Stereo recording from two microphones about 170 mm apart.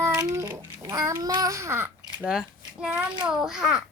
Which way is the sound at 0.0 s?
20° right (ahead or behind).